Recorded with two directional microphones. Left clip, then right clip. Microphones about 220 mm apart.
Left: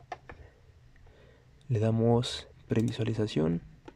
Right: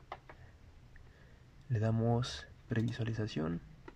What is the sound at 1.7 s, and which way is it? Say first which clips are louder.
Speech: left 8 dB; 15° left (ahead or behind).